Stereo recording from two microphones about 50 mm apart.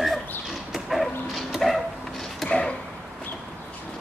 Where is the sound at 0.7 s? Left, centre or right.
Centre.